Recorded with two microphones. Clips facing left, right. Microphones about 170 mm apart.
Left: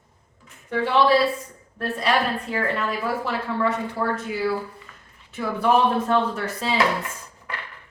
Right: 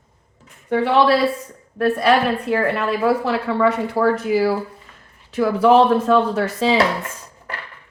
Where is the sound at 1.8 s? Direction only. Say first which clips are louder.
Right 7 dB; 70° right (ahead or behind).